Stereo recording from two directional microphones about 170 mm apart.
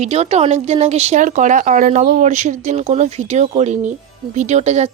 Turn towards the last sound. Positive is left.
turn(degrees=-40)  # may be behind; listen again after turning